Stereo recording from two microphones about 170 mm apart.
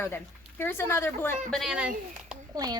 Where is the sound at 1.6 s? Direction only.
5° right (ahead or behind).